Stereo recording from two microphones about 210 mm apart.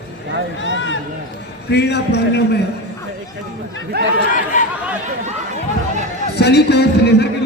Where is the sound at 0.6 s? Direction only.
60° left (ahead or behind).